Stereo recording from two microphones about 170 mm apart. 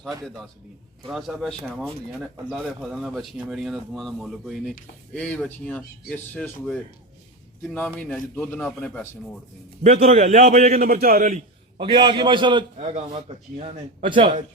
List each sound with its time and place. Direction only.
1.0 s speech: centre (ahead or behind)
9.8 s a man's voice: 40° right (ahead or behind)
11.8 s a man's voice: 30° right (ahead or behind)